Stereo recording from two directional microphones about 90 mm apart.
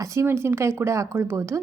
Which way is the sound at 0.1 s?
30° right (ahead or behind).